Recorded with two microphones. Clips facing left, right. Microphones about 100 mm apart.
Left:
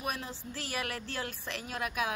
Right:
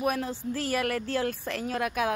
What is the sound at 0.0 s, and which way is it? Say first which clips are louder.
Speech: right 9 dB; 50° right (ahead or behind).